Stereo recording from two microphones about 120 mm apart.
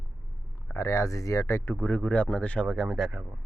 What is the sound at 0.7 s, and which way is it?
Speech, 25° left (ahead or behind).